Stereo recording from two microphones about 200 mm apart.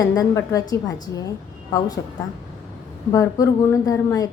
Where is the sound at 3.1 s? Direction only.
15° left (ahead or behind).